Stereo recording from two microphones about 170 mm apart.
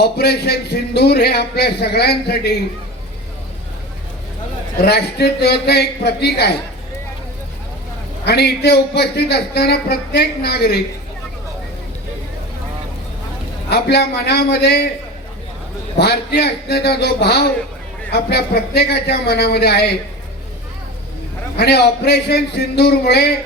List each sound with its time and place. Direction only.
0.0 s a man's voice: 70° left (ahead or behind)
4.8 s a man's voice: 70° left (ahead or behind)
8.2 s a man's voice: 70° left (ahead or behind)
13.7 s a man's voice: 75° left (ahead or behind)
16.0 s a man's voice: 70° left (ahead or behind)
21.6 s a man's voice: 70° left (ahead or behind)